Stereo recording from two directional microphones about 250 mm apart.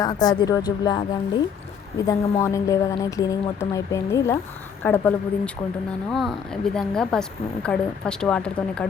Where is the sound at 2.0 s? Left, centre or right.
Centre.